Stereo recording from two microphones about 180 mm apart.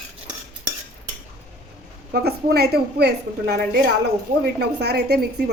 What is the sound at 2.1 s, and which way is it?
A woman's voice, 60° right (ahead or behind).